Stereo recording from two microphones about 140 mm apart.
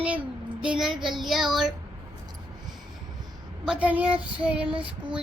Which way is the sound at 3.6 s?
5° right (ahead or behind).